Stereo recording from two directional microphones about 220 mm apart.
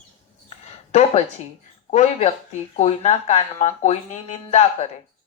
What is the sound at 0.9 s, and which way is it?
A woman's voice, 30° left (ahead or behind).